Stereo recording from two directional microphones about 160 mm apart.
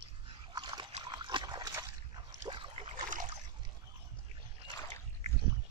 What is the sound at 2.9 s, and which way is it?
Boat, 55° right (ahead or behind).